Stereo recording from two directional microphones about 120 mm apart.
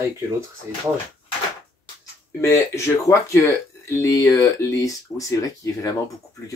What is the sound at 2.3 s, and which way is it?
Speech, 25° left (ahead or behind).